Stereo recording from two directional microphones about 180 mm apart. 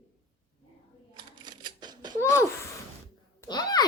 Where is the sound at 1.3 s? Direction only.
25° right (ahead or behind).